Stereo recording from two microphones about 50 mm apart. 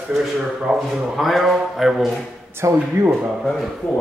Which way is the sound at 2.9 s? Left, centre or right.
Right.